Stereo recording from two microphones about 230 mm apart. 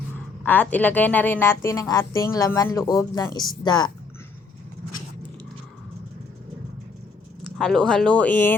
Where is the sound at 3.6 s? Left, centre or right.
Centre.